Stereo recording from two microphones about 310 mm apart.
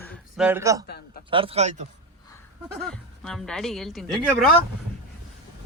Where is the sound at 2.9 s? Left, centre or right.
Centre.